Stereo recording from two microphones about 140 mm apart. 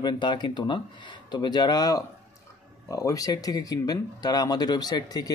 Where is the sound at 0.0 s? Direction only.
35° left (ahead or behind).